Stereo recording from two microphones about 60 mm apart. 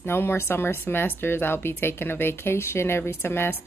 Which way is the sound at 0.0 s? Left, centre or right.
Left.